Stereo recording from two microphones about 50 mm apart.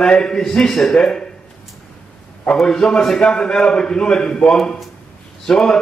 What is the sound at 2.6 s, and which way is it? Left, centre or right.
A man's voice, centre.